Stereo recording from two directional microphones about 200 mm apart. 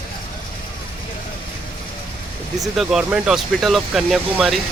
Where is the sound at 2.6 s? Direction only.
Centre (ahead or behind).